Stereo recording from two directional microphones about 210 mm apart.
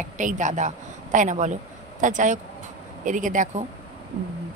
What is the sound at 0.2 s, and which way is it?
Speech, 35° right (ahead or behind).